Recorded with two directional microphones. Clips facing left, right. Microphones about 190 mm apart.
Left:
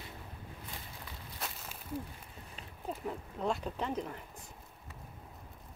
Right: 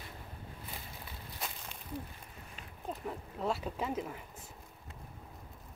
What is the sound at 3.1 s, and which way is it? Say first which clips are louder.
Speech: even; centre (ahead or behind).